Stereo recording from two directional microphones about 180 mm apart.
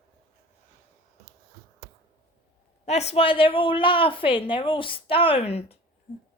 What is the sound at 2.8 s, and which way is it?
A woman's voice, 35° left (ahead or behind).